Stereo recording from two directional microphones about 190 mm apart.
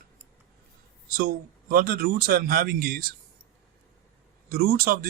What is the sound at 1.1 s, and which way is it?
Speech, 50° right (ahead or behind).